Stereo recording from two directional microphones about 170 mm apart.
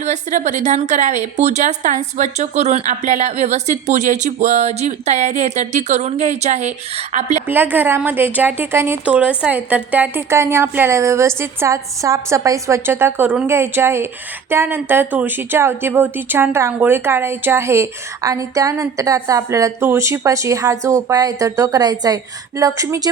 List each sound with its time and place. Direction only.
0.0 s a woman's voice: 45° right (ahead or behind)
7.4 s a woman's voice: 10° right (ahead or behind)